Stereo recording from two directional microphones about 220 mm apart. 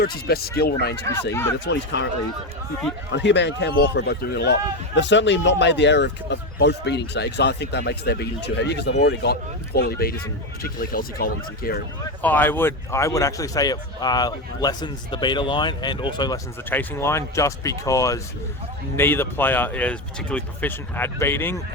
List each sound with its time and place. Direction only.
0.0 s speech: 45° left (ahead or behind)
1.3 s speech: 10° left (ahead or behind)
1.5 s speech: 50° left (ahead or behind)
3.1 s speech: 55° left (ahead or behind)
12.2 s speech: 10° left (ahead or behind)